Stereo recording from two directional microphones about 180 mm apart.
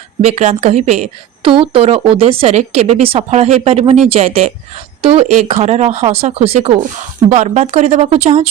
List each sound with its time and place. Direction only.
0.2 s a woman's voice: 35° right (ahead or behind)